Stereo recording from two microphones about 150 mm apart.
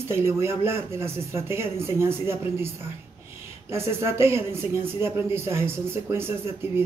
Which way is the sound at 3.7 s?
15° right (ahead or behind).